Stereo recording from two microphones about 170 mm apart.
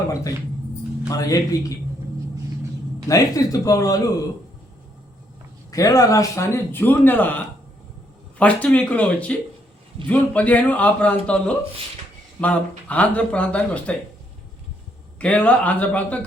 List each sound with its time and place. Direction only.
1.1 s speech: 20° left (ahead or behind)
3.1 s speech: 20° left (ahead or behind)
5.7 s speech: 20° left (ahead or behind)
15.2 s speech: 10° left (ahead or behind)